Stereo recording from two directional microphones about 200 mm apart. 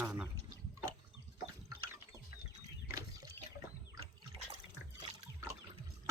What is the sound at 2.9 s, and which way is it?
Liquid, 15° right (ahead or behind).